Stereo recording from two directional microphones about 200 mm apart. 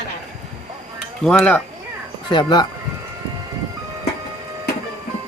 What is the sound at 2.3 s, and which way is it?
Speech, 20° left (ahead or behind).